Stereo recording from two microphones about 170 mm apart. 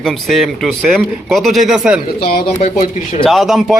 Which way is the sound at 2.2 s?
65° left (ahead or behind).